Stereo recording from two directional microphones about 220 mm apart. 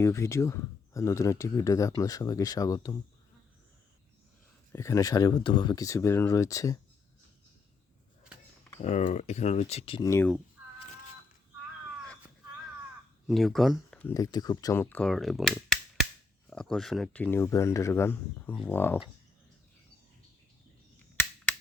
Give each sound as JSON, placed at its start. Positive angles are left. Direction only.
{"t": 0.0, "sound": "speech", "side_deg": 10}
{"t": 4.7, "sound": "speech", "side_deg": 15}
{"t": 8.8, "sound": "speech", "side_deg": 30}
{"t": 10.1, "sound": "speech", "side_deg": 10}
{"t": 13.2, "sound": "speech", "side_deg": 0}
{"t": 14.1, "sound": "speech", "side_deg": 15}